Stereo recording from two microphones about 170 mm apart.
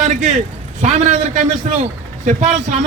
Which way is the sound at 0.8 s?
45° right (ahead or behind).